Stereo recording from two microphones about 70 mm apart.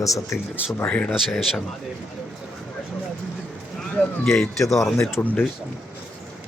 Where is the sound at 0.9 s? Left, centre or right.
Centre.